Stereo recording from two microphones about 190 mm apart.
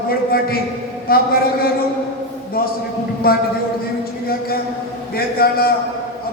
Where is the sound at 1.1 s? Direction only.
55° left (ahead or behind).